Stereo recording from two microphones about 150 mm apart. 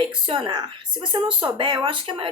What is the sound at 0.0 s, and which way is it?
Speech, 35° right (ahead or behind).